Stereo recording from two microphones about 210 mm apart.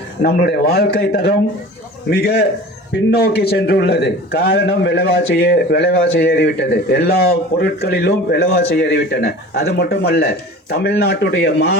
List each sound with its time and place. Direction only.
0.2 s a man's voice: 50° left (ahead or behind)